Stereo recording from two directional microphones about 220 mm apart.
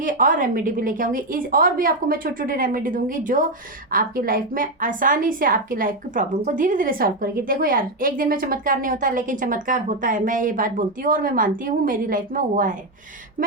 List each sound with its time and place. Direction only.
0.0 s a woman's voice: 35° right (ahead or behind)